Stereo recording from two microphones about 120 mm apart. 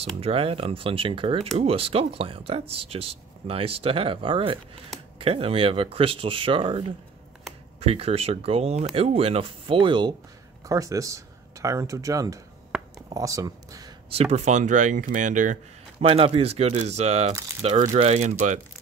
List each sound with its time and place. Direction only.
0.2 s speech: 55° right (ahead or behind)
7.8 s speech: 55° right (ahead or behind)
10.6 s speech: 30° right (ahead or behind)
12.7 s a sound: 5° right (ahead or behind)
13.1 s speech: 30° right (ahead or behind)
14.1 s speech: 65° right (ahead or behind); by 15.6 s 90° right
16.0 s speech: 55° right (ahead or behind); by 18.6 s 75° right (ahead or behind)